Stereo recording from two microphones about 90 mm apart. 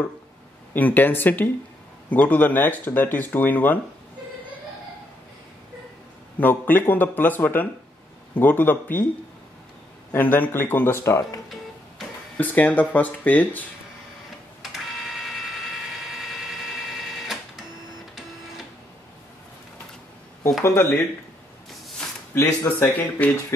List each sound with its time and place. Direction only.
0.7 s speech: 20° left (ahead or behind)
6.4 s speech: 20° left (ahead or behind)
10.1 s speech: 20° left (ahead or behind)
12.4 s speech: 20° left (ahead or behind)
14.6 s a sound: centre (ahead or behind)
20.6 s speech: 30° left (ahead or behind)
22.3 s speech: 30° left (ahead or behind)